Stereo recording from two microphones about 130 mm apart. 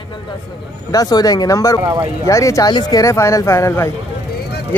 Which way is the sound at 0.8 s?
30° left (ahead or behind).